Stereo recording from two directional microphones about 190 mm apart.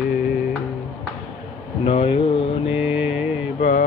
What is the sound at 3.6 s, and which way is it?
Mantra, 40° left (ahead or behind).